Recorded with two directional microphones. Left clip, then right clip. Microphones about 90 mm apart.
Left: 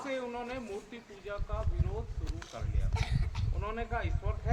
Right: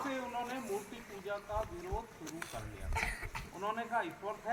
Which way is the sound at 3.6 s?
45° left (ahead or behind).